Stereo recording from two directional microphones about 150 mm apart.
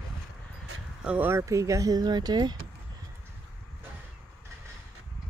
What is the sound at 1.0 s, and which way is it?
Speech, 10° right (ahead or behind).